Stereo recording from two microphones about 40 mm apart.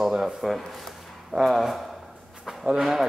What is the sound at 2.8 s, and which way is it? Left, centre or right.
Speech, centre.